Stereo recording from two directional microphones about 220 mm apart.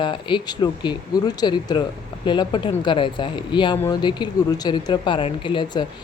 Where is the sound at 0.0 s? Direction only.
20° left (ahead or behind).